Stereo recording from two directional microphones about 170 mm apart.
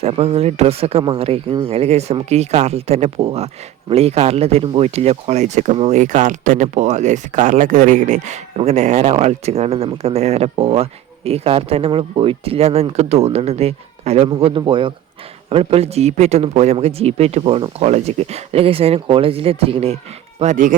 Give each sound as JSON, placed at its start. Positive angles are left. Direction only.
{"t": 0.0, "sound": "speech", "side_deg": -40}
{"t": 20.4, "sound": "speech", "side_deg": -50}